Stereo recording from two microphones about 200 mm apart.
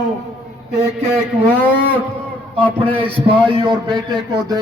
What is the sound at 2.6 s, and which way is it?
Speech, 5° left (ahead or behind).